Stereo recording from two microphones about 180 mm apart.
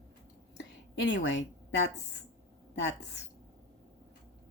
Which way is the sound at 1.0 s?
75° left (ahead or behind).